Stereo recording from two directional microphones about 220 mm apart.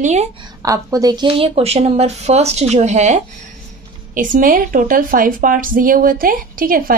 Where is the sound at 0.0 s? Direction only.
30° right (ahead or behind).